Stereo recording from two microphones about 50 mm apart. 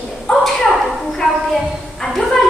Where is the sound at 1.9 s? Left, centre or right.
Centre.